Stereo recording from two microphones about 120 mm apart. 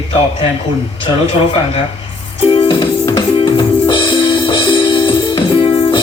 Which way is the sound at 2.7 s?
40° left (ahead or behind).